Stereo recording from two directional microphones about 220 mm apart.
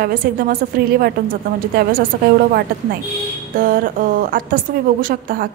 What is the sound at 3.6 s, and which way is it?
A woman's voice, 40° right (ahead or behind).